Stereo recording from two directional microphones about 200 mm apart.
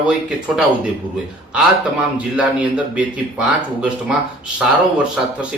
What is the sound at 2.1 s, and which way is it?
Speech, 5° right (ahead or behind).